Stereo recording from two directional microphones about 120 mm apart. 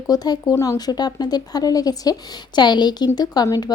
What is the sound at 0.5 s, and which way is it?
Speech, 20° left (ahead or behind).